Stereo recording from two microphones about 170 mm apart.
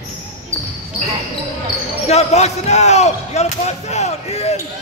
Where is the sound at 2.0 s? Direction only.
40° left (ahead or behind).